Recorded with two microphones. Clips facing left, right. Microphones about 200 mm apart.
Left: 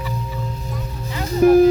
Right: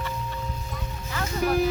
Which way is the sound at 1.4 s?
50° left (ahead or behind).